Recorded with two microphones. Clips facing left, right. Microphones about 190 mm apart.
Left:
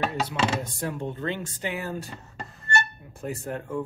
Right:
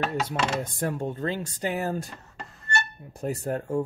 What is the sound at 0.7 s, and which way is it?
Speech, 45° right (ahead or behind).